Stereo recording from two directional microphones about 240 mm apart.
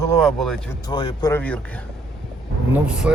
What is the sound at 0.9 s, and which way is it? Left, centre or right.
Speech, centre.